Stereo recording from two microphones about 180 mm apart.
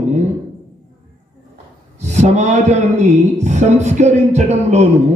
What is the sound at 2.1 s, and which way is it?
A man's voice, 40° right (ahead or behind).